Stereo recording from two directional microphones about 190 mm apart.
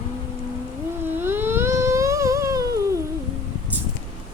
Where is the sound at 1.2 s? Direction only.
10° right (ahead or behind).